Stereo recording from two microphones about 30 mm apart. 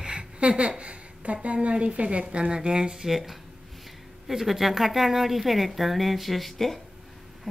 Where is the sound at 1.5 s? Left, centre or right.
Right.